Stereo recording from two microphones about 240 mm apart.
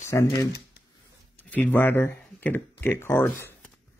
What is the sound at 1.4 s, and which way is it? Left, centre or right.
Speech, centre.